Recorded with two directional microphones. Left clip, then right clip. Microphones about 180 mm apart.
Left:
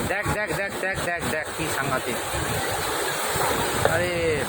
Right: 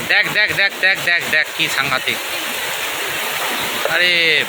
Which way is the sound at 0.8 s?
5° right (ahead or behind).